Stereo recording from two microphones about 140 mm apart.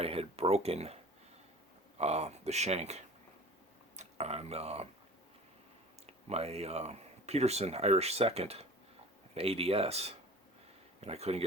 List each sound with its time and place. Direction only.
0.0 s speech: 45° right (ahead or behind)
2.0 s speech: 50° right (ahead or behind)
6.1 s speech: 50° right (ahead or behind)